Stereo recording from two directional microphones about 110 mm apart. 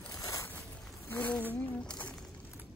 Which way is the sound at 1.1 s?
15° left (ahead or behind).